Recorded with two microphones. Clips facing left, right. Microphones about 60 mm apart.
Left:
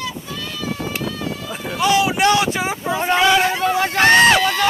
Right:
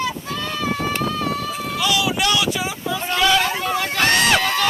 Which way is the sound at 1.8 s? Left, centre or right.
Left.